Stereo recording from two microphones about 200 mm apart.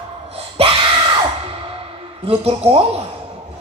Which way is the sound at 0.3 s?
30° right (ahead or behind).